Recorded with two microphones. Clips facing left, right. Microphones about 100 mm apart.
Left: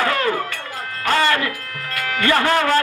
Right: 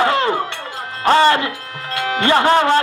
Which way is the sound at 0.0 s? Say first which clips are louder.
Right 3 dB; 25° right (ahead or behind).